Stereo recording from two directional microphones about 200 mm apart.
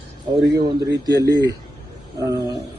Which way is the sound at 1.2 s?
15° left (ahead or behind).